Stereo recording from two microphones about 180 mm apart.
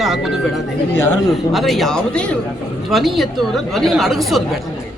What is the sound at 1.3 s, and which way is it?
A woman's voice, centre (ahead or behind).